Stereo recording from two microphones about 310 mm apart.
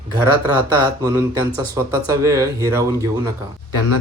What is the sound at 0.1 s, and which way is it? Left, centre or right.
Speech, centre.